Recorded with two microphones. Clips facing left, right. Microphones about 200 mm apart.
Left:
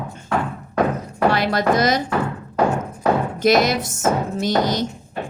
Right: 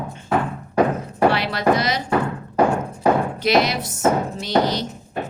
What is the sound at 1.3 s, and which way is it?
Speech, 45° left (ahead or behind).